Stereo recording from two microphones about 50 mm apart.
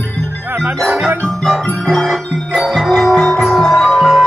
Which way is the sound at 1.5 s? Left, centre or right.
Centre.